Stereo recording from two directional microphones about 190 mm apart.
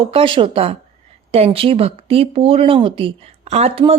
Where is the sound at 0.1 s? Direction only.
30° right (ahead or behind).